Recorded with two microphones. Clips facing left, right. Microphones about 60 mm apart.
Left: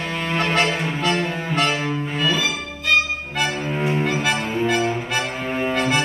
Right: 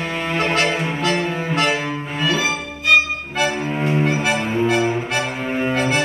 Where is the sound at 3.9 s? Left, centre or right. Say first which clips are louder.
Right 3 dB; centre.